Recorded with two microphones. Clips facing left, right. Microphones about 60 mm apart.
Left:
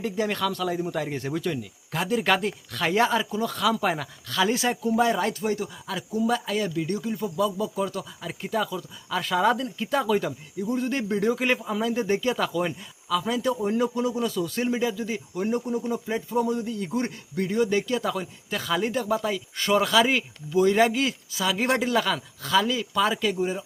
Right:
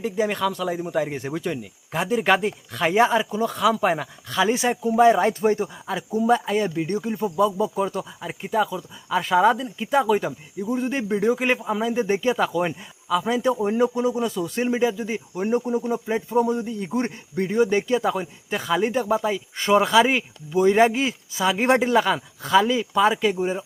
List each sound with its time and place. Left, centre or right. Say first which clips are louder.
0.0 s speech: right 3 dB; centre